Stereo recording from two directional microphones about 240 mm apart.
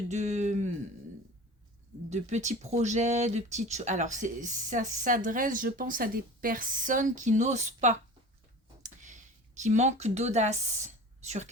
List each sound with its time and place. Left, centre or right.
0.1 s speech: right
2.0 s speech: right
8.8 s a sound: right